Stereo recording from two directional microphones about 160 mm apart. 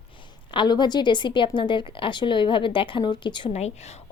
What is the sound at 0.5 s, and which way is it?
A woman's voice, 25° left (ahead or behind).